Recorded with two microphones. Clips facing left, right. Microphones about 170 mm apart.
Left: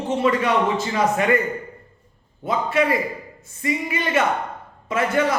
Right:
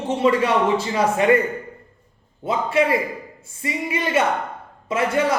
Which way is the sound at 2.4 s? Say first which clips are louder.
Right 1 dB; 25° right (ahead or behind).